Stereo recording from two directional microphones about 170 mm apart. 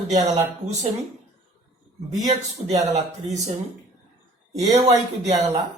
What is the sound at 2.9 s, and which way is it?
Speech, 45° right (ahead or behind).